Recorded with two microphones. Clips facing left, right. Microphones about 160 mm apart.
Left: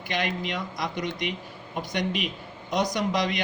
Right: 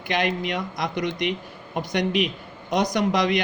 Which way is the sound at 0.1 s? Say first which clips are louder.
Right 5 dB; 55° right (ahead or behind).